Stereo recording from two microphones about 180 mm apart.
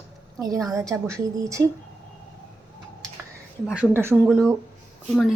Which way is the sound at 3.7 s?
10° right (ahead or behind).